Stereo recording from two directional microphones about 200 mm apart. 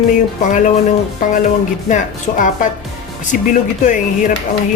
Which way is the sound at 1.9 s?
40° left (ahead or behind).